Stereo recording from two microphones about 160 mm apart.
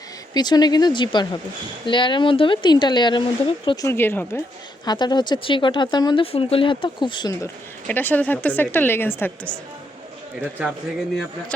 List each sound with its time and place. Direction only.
0.3 s speech: 25° left (ahead or behind)
3.8 s a woman's voice: 15° left (ahead or behind)
4.9 s speech: 25° left (ahead or behind)
7.9 s a woman's voice: 10° left (ahead or behind)
10.4 s speech: 5° right (ahead or behind)